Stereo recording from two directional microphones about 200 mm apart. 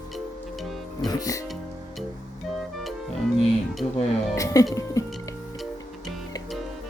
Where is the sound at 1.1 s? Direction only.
15° left (ahead or behind).